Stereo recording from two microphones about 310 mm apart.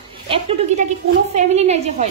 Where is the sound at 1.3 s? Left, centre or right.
Right.